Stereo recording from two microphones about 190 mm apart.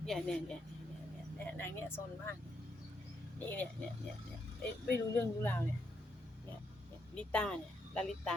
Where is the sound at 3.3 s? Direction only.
10° left (ahead or behind).